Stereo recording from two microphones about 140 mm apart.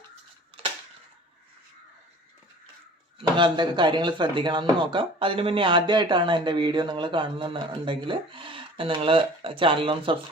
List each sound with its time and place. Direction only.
3.2 s speech: 35° right (ahead or behind)